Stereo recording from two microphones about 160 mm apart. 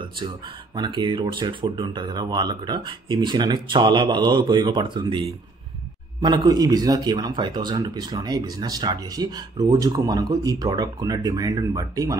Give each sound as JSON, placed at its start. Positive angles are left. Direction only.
{"t": 0.7, "sound": "a man's voice", "side_deg": -30}
{"t": 6.2, "sound": "a man's voice", "side_deg": -25}